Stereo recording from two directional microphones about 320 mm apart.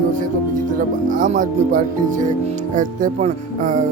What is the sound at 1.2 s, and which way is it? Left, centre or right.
Music, right.